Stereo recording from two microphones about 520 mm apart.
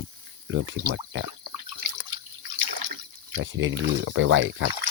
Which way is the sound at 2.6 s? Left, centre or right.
Right.